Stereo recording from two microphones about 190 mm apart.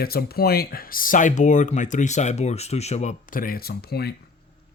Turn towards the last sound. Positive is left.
turn(degrees=55)  # may be behind; listen again after turning